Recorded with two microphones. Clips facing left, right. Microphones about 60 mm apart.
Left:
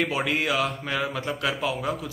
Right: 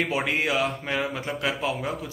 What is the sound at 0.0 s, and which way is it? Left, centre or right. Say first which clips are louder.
Speech: even; right.